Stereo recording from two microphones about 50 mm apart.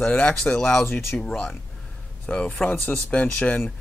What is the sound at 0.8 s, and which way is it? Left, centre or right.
Speech, left.